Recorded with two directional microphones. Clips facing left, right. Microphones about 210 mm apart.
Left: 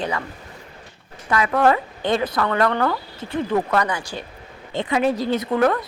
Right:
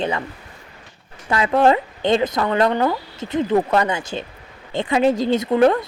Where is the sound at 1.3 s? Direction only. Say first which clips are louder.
Right 2 dB; 25° right (ahead or behind).